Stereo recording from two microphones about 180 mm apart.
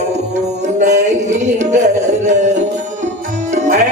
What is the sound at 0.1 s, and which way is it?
Music, 40° right (ahead or behind).